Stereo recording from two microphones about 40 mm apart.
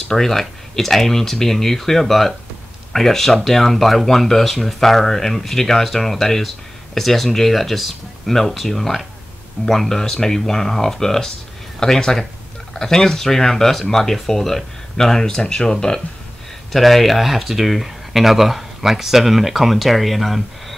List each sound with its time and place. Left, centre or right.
0.1 s speech: centre
16.7 s speech: centre